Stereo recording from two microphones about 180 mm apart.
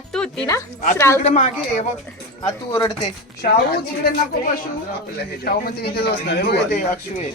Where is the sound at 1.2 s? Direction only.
40° left (ahead or behind).